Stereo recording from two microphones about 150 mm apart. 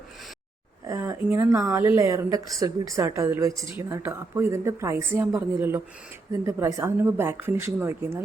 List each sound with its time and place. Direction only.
0.9 s a woman's voice: 20° right (ahead or behind)